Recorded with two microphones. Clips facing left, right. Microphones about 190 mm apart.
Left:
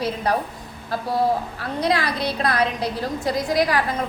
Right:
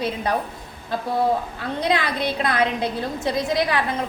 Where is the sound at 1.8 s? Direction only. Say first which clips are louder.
Left 1 dB; 20° right (ahead or behind).